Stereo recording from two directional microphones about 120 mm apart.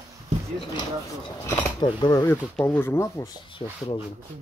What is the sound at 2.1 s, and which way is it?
Speech, 25° left (ahead or behind).